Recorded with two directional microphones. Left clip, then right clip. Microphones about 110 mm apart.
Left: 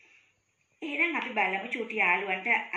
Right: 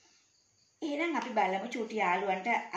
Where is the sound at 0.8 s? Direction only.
20° right (ahead or behind).